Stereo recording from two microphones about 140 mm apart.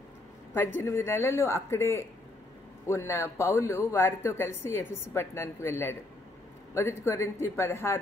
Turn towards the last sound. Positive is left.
turn(degrees=20)  # may be behind; listen again after turning